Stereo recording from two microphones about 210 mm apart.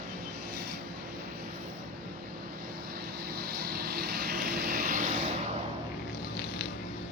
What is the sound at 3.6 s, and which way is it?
Vehicle, 50° right (ahead or behind).